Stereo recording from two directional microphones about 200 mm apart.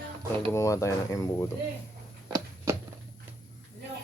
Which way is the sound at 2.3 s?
15° right (ahead or behind).